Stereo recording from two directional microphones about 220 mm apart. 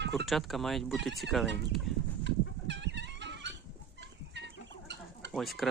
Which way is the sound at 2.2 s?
50° right (ahead or behind).